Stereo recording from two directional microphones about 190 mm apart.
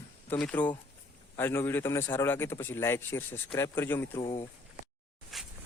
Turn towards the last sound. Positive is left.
turn(degrees=0)  # may be behind; listen again after turning